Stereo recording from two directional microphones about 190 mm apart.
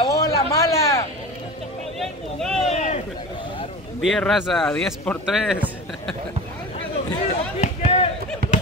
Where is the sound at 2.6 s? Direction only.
35° left (ahead or behind).